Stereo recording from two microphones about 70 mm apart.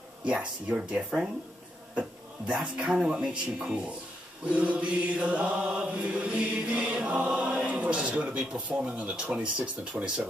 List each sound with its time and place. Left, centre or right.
0.2 s mantra: centre